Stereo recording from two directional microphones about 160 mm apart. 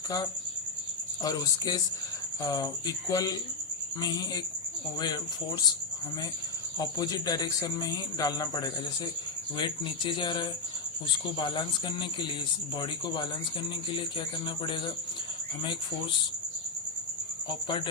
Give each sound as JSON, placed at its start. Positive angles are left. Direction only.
{"t": 1.2, "sound": "speech", "side_deg": 25}
{"t": 6.7, "sound": "speech", "side_deg": 25}
{"t": 17.5, "sound": "speech", "side_deg": 30}